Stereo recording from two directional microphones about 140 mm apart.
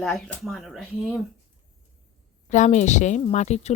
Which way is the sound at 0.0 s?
5° left (ahead or behind).